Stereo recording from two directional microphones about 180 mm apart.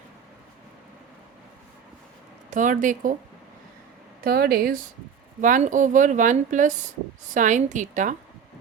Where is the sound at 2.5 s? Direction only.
45° right (ahead or behind).